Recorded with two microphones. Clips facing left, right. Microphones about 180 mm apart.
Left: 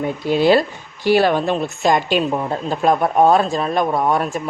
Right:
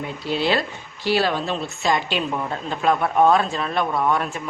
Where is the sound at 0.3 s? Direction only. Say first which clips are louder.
Left 8 dB; 45° left (ahead or behind).